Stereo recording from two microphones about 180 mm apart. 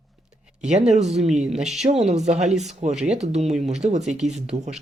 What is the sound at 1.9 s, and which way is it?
Speech, 40° right (ahead or behind).